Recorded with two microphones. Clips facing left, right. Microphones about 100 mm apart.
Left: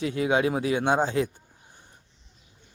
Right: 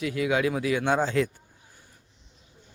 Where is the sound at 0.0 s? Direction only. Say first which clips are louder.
Left 1 dB; 30° left (ahead or behind).